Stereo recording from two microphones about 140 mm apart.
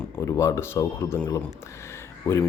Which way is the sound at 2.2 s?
20° left (ahead or behind).